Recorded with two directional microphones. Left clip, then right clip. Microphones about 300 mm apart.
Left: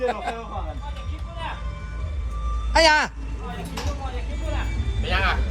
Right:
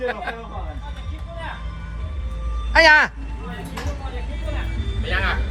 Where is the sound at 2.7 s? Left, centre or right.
Centre.